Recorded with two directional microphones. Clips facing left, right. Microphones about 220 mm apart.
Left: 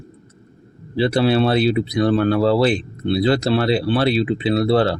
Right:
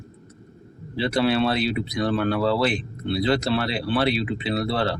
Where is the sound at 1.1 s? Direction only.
30° left (ahead or behind).